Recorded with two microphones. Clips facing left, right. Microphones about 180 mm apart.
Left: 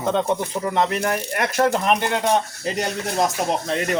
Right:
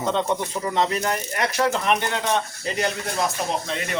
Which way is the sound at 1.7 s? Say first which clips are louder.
Left 3 dB; 40° left (ahead or behind).